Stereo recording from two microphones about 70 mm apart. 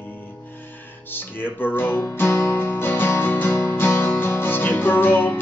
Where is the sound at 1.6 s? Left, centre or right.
Left.